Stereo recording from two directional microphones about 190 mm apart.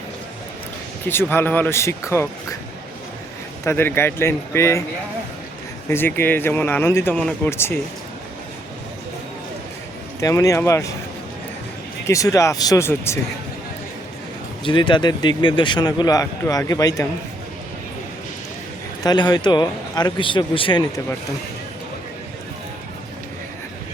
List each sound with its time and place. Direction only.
1.0 s speech: 10° left (ahead or behind)
3.6 s speech: 15° left (ahead or behind)
5.9 s speech: 10° left (ahead or behind)
10.2 s speech: 15° left (ahead or behind)
12.0 s speech: 15° left (ahead or behind)
14.6 s speech: 25° left (ahead or behind)
19.0 s speech: 20° left (ahead or behind)